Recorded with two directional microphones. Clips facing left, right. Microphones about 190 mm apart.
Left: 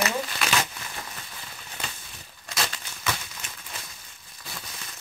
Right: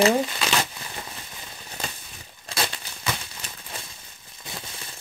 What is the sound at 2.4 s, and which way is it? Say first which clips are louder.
Crumpling: right 2 dB; 30° right (ahead or behind).